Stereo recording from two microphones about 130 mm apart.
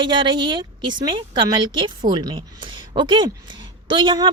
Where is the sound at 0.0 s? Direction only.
35° right (ahead or behind).